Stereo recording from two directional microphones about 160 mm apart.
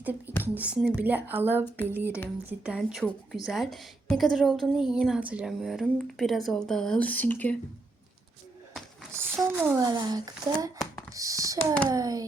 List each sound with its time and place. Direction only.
0.0 s a woman's voice: 10° right (ahead or behind); by 7.5 s 10° left (ahead or behind)
9.1 s speech: 15° right (ahead or behind)
9.8 s a child's voice: 25° right (ahead or behind)
11.5 s a child's voice: 10° left (ahead or behind)
11.9 s speech: 20° right (ahead or behind)